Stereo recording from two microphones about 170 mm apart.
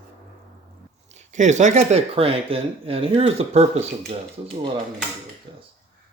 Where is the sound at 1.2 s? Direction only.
45° right (ahead or behind).